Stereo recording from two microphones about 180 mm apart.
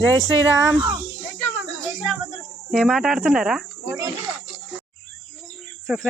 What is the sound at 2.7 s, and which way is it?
Speech, centre (ahead or behind).